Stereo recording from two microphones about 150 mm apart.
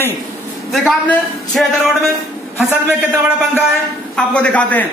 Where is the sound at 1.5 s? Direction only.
Centre (ahead or behind).